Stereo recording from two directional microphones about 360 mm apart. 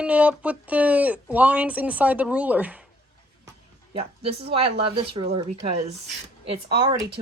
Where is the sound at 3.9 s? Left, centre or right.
Centre.